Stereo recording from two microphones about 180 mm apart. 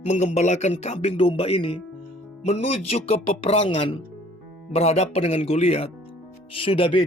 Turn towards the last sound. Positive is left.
turn(degrees=30)  # may be behind; listen again after turning